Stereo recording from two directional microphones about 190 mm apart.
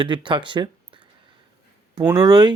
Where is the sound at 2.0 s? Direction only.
15° right (ahead or behind).